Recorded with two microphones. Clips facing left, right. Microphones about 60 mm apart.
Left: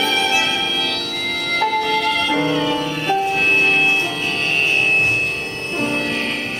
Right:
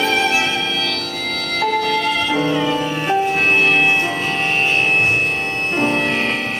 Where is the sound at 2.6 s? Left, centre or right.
Centre; by 6.3 s right.